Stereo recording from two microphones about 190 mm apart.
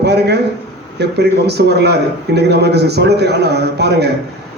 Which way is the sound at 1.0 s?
60° right (ahead or behind).